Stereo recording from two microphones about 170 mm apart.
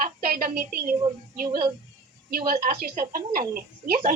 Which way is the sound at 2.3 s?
60° right (ahead or behind).